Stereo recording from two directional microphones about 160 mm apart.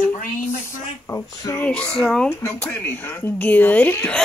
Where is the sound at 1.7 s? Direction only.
5° left (ahead or behind).